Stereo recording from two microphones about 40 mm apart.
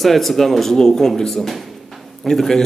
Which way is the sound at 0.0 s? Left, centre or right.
Centre.